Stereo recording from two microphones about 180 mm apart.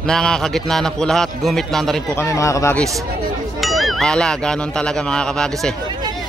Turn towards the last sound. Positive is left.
turn(degrees=5)  # may be behind; listen again after turning